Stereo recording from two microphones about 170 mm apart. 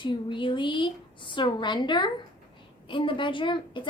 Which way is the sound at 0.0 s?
30° left (ahead or behind).